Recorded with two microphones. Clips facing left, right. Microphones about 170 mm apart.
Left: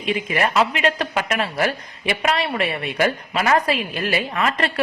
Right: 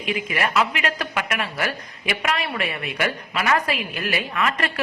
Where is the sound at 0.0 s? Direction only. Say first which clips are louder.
Left 3 dB; 30° left (ahead or behind).